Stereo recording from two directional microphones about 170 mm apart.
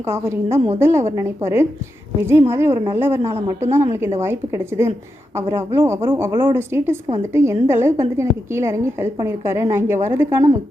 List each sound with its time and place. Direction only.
0.8 s a woman's voice: 15° right (ahead or behind)